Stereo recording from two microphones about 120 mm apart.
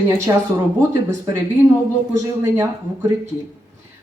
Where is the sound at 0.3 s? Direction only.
25° right (ahead or behind).